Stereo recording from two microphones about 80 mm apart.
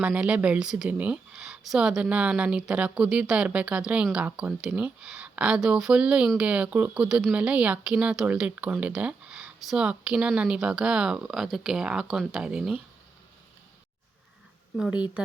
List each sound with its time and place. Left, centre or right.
0.0 s speech: centre